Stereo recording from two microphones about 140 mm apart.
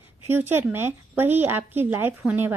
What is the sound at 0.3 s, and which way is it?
A woman's voice, 15° right (ahead or behind).